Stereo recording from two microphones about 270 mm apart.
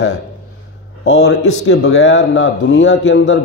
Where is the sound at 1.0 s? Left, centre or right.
Left.